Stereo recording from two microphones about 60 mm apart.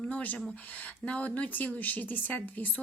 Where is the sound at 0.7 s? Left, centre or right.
Left.